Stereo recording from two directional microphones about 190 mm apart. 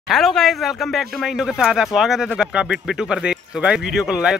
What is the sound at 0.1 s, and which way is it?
Speech, centre (ahead or behind).